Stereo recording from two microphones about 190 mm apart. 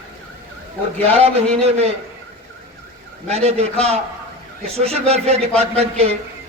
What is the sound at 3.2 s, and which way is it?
Speech, 35° right (ahead or behind).